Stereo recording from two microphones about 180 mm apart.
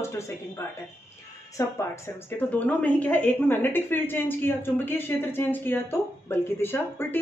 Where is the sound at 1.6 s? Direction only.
15° left (ahead or behind).